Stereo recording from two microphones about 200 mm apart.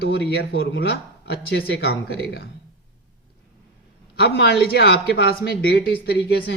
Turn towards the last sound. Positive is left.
turn(degrees=55)  # may be behind; listen again after turning